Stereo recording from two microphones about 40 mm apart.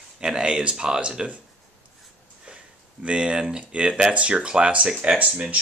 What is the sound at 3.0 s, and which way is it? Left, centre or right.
Speech, right.